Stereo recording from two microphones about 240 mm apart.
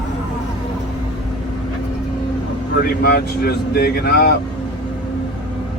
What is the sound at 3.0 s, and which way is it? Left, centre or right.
Speech, left.